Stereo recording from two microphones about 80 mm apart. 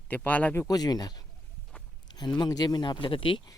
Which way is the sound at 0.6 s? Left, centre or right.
Left.